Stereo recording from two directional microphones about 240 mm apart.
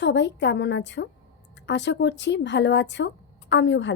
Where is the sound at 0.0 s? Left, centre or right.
Left.